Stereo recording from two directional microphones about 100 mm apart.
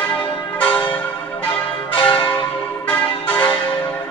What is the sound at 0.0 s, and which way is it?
Church bell, 15° left (ahead or behind).